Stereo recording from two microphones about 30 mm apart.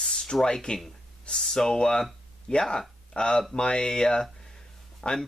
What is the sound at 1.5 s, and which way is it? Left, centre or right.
Speech, centre.